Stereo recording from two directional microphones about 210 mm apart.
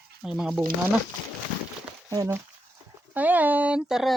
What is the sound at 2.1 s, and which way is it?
Speech, 15° right (ahead or behind).